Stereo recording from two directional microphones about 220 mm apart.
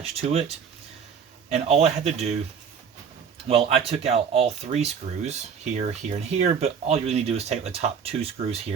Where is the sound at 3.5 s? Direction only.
25° right (ahead or behind).